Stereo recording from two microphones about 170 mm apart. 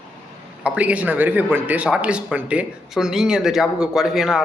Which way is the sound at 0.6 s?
10° right (ahead or behind).